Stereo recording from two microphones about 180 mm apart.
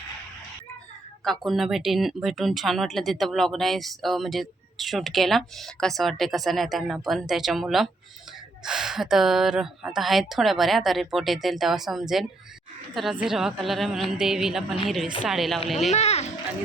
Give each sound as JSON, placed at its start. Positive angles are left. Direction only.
{"t": 1.2, "sound": "speech", "side_deg": 0}
{"t": 15.9, "sound": "a child's voice", "side_deg": 35}